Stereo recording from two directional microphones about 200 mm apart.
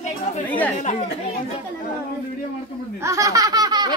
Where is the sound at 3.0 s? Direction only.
15° right (ahead or behind).